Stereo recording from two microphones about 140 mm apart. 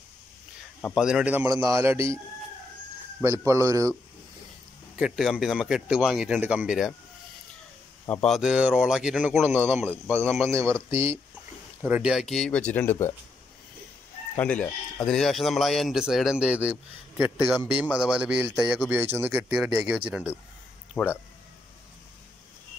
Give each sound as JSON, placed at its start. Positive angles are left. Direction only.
{"t": 0.9, "sound": "a man's voice", "side_deg": -5}
{"t": 3.2, "sound": "speech", "side_deg": -20}
{"t": 4.9, "sound": "speech", "side_deg": -5}
{"t": 8.1, "sound": "speech", "side_deg": 5}
{"t": 8.4, "sound": "a man's voice", "side_deg": -5}
{"t": 9.8, "sound": "speech", "side_deg": 10}
{"t": 10.9, "sound": "a man's voice", "side_deg": -15}
{"t": 11.8, "sound": "speech", "side_deg": -5}
{"t": 14.3, "sound": "a man's voice", "side_deg": 10}